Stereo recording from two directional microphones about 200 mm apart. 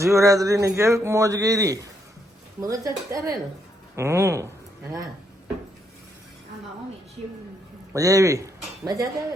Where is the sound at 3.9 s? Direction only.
15° right (ahead or behind).